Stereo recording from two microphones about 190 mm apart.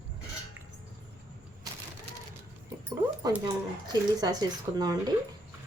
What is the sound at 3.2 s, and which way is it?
Speech, 20° right (ahead or behind).